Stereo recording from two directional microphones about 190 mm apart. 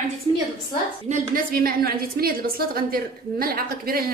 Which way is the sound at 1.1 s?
50° right (ahead or behind).